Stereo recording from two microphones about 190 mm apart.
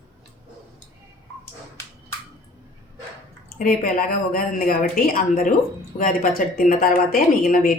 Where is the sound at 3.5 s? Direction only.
50° left (ahead or behind).